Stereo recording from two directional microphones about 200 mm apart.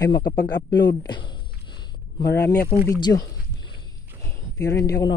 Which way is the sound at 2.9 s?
20° left (ahead or behind).